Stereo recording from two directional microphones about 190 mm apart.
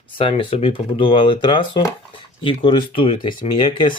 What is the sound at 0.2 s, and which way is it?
Speech, 30° left (ahead or behind).